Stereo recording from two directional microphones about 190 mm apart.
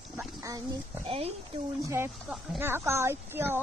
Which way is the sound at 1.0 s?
30° right (ahead or behind).